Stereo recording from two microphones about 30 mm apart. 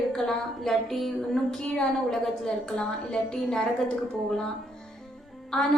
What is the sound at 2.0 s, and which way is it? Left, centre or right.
Speech, centre.